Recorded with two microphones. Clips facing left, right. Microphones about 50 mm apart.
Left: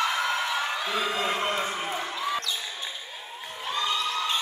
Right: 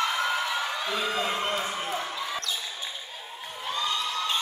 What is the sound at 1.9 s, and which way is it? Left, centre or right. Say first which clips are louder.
Basketball bounce: left 2 dB; centre.